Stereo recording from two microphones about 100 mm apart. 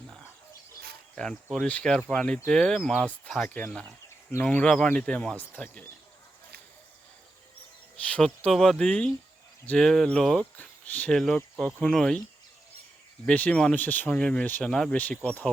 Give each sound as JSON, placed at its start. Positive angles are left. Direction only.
{"t": 1.1, "sound": "speech", "side_deg": 10}
{"t": 4.4, "sound": "speech", "side_deg": 10}
{"t": 8.0, "sound": "speech", "side_deg": 15}
{"t": 10.8, "sound": "speech", "side_deg": 15}
{"t": 11.2, "sound": "speech", "side_deg": 5}
{"t": 13.2, "sound": "speech", "side_deg": 10}